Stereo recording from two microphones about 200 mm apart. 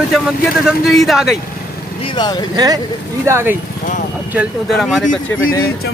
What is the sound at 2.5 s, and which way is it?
Speech, 20° right (ahead or behind).